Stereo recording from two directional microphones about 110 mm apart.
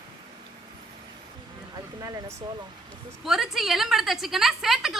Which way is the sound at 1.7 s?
30° right (ahead or behind).